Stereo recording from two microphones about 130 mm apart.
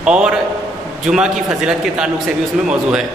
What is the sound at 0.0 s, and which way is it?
A man's voice, 5° right (ahead or behind).